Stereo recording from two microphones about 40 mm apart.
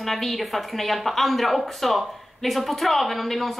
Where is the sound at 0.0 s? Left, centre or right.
Centre.